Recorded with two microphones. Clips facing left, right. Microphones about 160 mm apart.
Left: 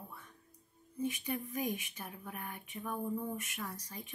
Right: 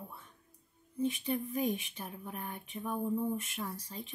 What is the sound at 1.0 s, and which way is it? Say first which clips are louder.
Speech: right 4 dB; 25° right (ahead or behind).